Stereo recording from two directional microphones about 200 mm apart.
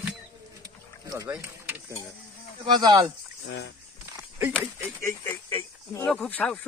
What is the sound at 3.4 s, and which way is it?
Speech, 60° left (ahead or behind).